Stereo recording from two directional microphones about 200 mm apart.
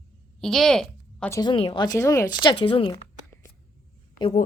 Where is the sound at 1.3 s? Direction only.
25° left (ahead or behind).